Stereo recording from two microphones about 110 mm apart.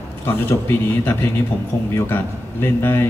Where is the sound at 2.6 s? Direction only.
20° left (ahead or behind).